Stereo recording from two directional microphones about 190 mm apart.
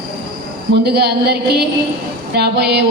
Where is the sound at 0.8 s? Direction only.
60° right (ahead or behind).